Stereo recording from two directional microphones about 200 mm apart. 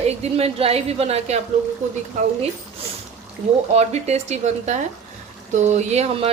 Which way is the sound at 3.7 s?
30° right (ahead or behind).